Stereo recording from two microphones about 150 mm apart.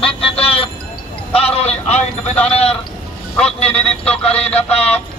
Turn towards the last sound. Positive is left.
turn(degrees=45)  # may be behind; listen again after turning